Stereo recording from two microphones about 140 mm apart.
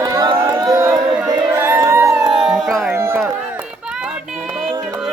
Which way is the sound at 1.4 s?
15° right (ahead or behind).